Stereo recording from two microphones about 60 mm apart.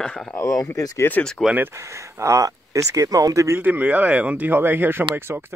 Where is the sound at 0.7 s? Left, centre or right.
Left.